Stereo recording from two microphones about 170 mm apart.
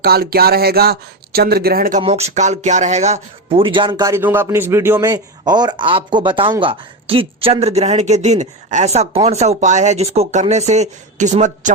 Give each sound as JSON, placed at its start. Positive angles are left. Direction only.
{"t": 0.0, "sound": "speech", "side_deg": -65}
{"t": 2.0, "sound": "speech", "side_deg": -35}